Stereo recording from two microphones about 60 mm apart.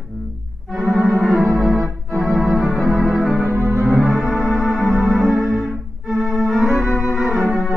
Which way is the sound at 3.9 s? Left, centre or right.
Centre.